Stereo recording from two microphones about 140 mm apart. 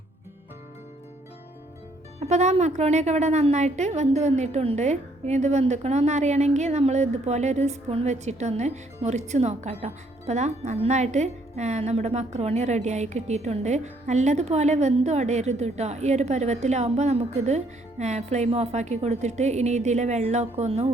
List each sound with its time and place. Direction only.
2.1 s a woman's voice: 55° right (ahead or behind)